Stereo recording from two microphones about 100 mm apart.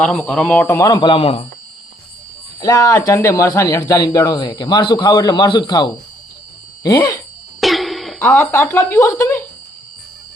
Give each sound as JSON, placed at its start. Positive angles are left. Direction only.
{"t": 0.0, "sound": "speech", "side_deg": 10}
{"t": 0.9, "sound": "a man's voice", "side_deg": 55}
{"t": 2.6, "sound": "a man's voice", "side_deg": 40}
{"t": 4.2, "sound": "a man's voice", "side_deg": 50}
{"t": 7.6, "sound": "cough", "side_deg": 0}
{"t": 8.3, "sound": "speech", "side_deg": 10}
{"t": 8.7, "sound": "speech", "side_deg": 25}